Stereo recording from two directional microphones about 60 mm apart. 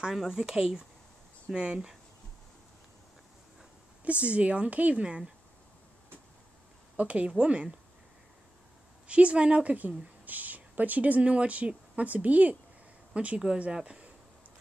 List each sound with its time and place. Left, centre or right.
0.0 s speech: centre
4.0 s a woman's voice: right
7.0 s a woman's voice: right
9.0 s a woman's voice: centre